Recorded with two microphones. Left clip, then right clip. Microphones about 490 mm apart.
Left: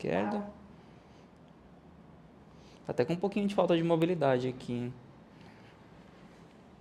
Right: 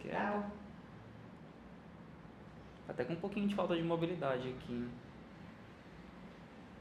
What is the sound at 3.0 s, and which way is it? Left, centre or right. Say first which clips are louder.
Speech: left 9 dB; left.